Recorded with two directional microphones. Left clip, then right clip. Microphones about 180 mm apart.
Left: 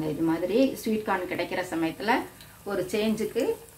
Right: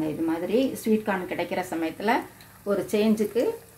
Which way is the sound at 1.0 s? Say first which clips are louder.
Even; 55° right (ahead or behind).